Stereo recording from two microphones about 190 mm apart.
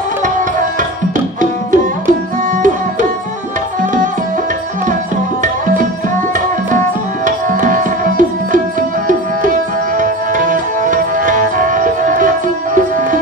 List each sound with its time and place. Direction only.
0.2 s tabla: 45° right (ahead or behind)
7.2 s tabla: 45° right (ahead or behind)
9.9 s tabla: 45° right (ahead or behind)